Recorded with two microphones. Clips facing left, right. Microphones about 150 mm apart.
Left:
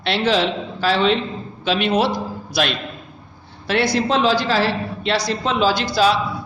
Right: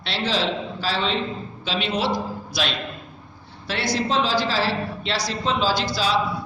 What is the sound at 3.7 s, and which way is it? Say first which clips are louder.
A woman's voice: left 6 dB; 55° left (ahead or behind).